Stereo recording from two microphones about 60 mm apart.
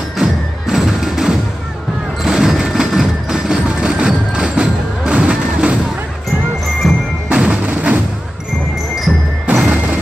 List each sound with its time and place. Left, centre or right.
0.2 s music: centre
6.8 s music: centre
7.2 s music: centre
7.7 s artillery fire: right
9.5 s music: centre